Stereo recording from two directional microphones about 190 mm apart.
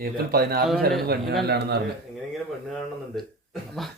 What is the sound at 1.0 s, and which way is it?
Speech, 55° right (ahead or behind).